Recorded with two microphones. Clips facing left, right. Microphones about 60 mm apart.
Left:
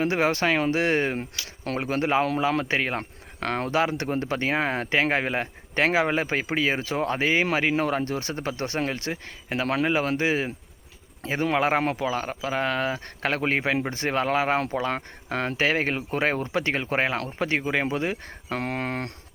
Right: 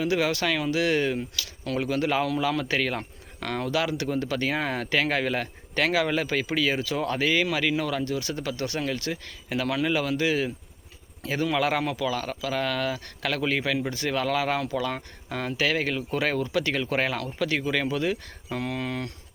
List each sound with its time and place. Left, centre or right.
0.0 s speech: left
3.0 s speech: left
18.4 s speech: left